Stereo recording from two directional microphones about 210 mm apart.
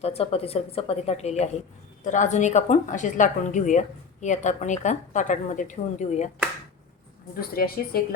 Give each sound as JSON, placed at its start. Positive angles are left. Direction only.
{"t": 0.0, "sound": "a woman's voice", "side_deg": 30}
{"t": 7.3, "sound": "speech", "side_deg": 45}